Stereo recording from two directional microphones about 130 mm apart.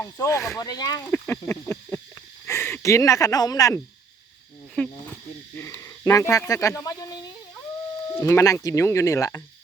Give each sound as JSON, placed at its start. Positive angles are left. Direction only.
{"t": 0.0, "sound": "speech", "side_deg": 20}
{"t": 1.0, "sound": "speech", "side_deg": 10}
{"t": 4.7, "sound": "insect", "side_deg": 10}
{"t": 5.5, "sound": "a sound", "side_deg": 20}
{"t": 8.1, "sound": "speech", "side_deg": 20}